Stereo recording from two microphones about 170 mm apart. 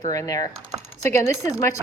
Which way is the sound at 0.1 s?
20° left (ahead or behind).